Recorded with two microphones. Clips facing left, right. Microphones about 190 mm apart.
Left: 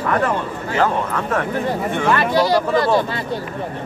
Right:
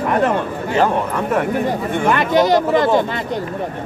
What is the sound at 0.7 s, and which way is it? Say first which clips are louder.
Speech: right 2 dB; 15° right (ahead or behind).